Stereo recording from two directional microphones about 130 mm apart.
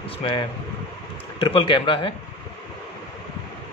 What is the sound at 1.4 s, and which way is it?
Speech, 40° left (ahead or behind).